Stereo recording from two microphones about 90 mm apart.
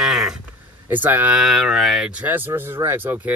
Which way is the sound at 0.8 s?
20° right (ahead or behind).